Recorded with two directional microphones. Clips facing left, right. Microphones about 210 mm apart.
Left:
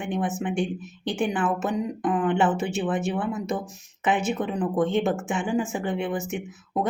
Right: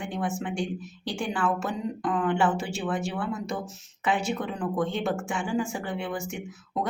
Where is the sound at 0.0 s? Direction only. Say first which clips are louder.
Left 3 dB; 20° left (ahead or behind).